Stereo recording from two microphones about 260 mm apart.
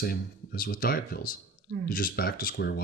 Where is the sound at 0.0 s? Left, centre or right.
Left.